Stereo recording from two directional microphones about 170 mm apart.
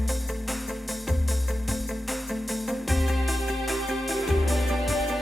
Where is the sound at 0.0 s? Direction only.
Centre (ahead or behind).